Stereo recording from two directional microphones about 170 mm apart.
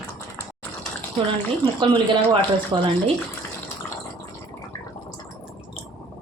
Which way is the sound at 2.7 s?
25° right (ahead or behind).